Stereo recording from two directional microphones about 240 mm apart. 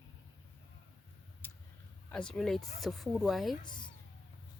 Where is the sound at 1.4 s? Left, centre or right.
Centre.